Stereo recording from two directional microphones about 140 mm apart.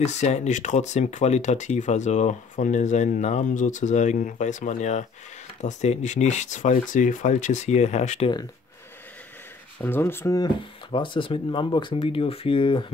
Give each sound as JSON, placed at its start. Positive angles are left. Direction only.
{"t": 0.0, "sound": "speech", "side_deg": 55}
{"t": 9.8, "sound": "speech", "side_deg": 15}
{"t": 10.9, "sound": "speech", "side_deg": 40}